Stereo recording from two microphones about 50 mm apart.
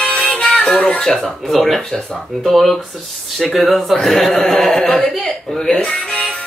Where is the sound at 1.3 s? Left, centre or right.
Centre.